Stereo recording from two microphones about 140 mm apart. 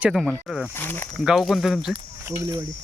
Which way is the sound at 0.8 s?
15° left (ahead or behind).